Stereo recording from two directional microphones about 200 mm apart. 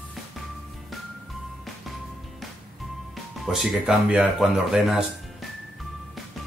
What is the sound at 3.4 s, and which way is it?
Speech, centre (ahead or behind).